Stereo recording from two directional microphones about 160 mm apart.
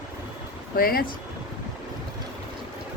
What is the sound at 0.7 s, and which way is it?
Speech, 70° left (ahead or behind).